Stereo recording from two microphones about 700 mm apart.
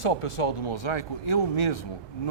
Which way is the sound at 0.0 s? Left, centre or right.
Left.